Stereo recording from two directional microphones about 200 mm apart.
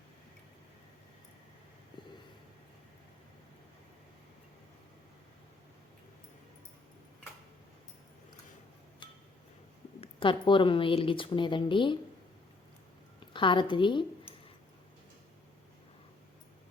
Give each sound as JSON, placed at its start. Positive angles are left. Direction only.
{"t": 9.0, "sound": "a sound", "side_deg": 25}
{"t": 10.0, "sound": "a woman's voice", "side_deg": 25}
{"t": 13.1, "sound": "a woman's voice", "side_deg": 25}